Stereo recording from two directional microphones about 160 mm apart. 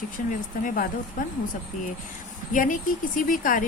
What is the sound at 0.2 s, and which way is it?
Speech, 60° left (ahead or behind).